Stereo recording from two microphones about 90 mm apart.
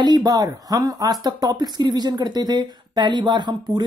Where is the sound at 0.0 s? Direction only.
50° right (ahead or behind).